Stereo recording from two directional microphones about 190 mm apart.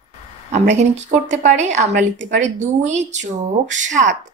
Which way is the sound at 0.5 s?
35° right (ahead or behind).